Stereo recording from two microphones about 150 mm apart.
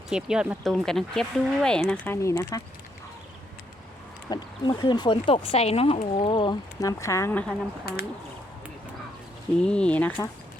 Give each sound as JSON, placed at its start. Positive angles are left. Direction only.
{"t": 0.1, "sound": "speech", "side_deg": -5}
{"t": 2.1, "sound": "speech", "side_deg": 20}
{"t": 4.3, "sound": "speech", "side_deg": 30}
{"t": 7.9, "sound": "speech", "side_deg": 90}
{"t": 9.6, "sound": "speech", "side_deg": 5}